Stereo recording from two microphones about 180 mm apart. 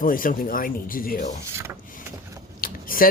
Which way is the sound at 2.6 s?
50° left (ahead or behind).